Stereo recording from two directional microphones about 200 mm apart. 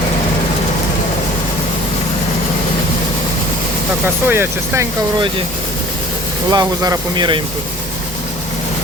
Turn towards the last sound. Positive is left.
turn(degrees=-25)  # may be behind; listen again after turning